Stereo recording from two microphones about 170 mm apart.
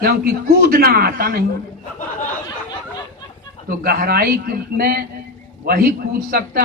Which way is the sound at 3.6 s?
60° right (ahead or behind).